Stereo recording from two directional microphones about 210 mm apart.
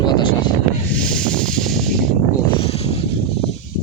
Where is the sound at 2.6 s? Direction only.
30° left (ahead or behind).